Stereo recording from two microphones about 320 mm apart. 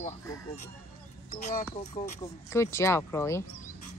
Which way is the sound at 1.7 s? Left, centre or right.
Left.